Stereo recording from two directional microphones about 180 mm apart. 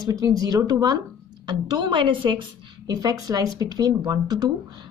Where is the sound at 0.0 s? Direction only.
20° right (ahead or behind).